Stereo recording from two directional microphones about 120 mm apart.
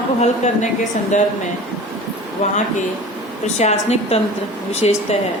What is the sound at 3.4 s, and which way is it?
A woman's voice, 65° left (ahead or behind).